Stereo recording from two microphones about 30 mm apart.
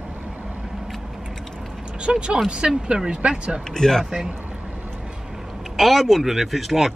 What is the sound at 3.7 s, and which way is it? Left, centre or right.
Speech, centre.